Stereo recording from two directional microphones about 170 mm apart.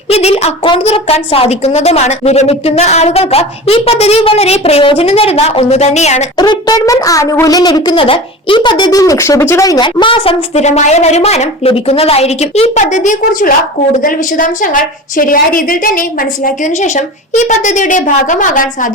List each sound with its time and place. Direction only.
0.1 s a woman's voice: 35° left (ahead or behind)
6.3 s a woman's voice: 25° left (ahead or behind); by 18.9 s 50° left (ahead or behind)